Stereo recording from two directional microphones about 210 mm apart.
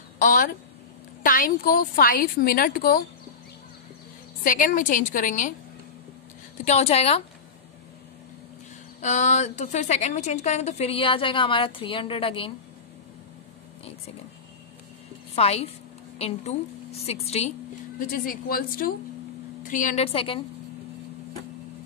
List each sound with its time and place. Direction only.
0.2 s a woman's voice: 40° left (ahead or behind)
4.4 s a woman's voice: 40° left (ahead or behind)
6.6 s a woman's voice: 30° left (ahead or behind)
9.0 s a woman's voice: 35° left (ahead or behind)
15.3 s a woman's voice: 30° left (ahead or behind)